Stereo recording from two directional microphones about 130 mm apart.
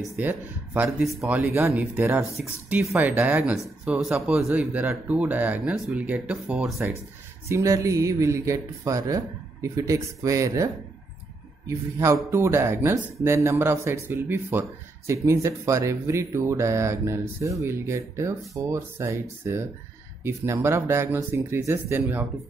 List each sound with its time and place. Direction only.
0.1 s speech: 15° right (ahead or behind)
0.8 s speech: centre (ahead or behind)
2.3 s speech: centre (ahead or behind)
2.9 s speech: 15° right (ahead or behind)
7.4 s speech: 20° right (ahead or behind)